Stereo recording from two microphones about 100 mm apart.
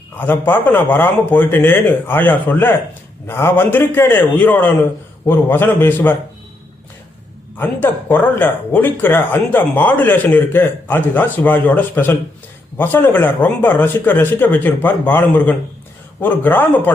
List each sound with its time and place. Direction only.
0.2 s speech: 20° left (ahead or behind)
7.6 s speech: 20° left (ahead or behind)